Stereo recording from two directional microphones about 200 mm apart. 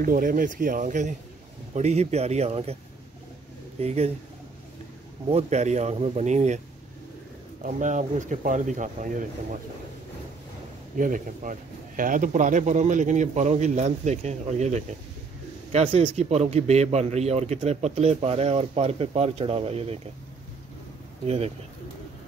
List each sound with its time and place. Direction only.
0.0 s speech: 45° right (ahead or behind)
3.8 s speech: 30° right (ahead or behind)
5.3 s speech: 35° right (ahead or behind)
7.6 s speech: 40° right (ahead or behind)
11.0 s speech: 40° right (ahead or behind)